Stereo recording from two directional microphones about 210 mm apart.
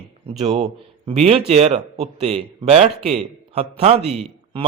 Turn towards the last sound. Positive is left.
turn(degrees=-25)  # may be behind; listen again after turning